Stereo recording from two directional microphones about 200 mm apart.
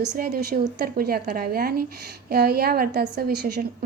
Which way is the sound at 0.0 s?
50° right (ahead or behind).